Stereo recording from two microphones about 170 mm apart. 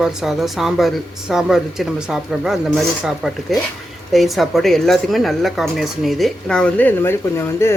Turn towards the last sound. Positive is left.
turn(degrees=15)  # may be behind; listen again after turning